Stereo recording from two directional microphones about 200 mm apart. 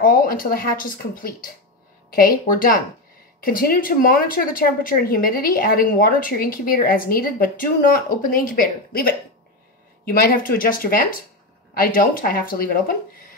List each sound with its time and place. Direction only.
0.0 s speech: 45° left (ahead or behind)